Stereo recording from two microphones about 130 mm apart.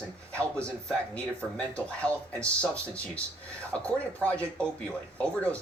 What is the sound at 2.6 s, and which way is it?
Speech, 10° left (ahead or behind).